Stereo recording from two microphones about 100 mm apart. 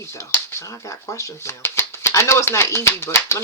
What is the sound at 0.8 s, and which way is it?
Speech, 30° left (ahead or behind).